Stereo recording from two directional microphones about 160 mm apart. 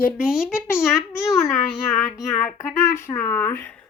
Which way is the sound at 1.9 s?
15° left (ahead or behind).